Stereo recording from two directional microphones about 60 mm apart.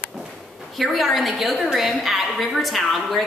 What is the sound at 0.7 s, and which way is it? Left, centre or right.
A woman's voice, centre.